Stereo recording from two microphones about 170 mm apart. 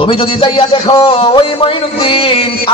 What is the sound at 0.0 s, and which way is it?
A man's voice, 30° left (ahead or behind).